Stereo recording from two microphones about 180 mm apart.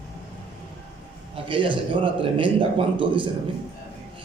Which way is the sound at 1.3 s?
30° right (ahead or behind).